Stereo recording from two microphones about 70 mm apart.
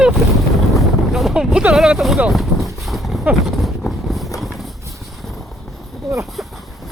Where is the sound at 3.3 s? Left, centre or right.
Right.